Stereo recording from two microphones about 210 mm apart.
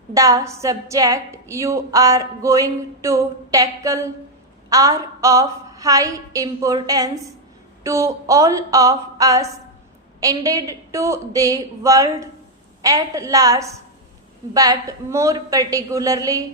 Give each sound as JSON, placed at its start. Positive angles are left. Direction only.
{"t": 0.1, "sound": "a woman's voice", "side_deg": -15}